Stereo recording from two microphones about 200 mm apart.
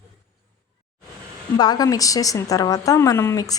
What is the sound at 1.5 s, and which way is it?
A woman's voice, 20° left (ahead or behind).